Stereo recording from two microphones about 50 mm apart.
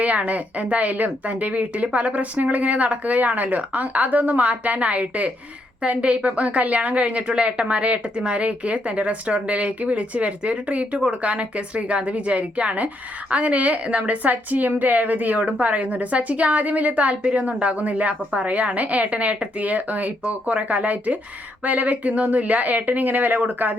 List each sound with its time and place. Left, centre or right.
0.0 s speech: right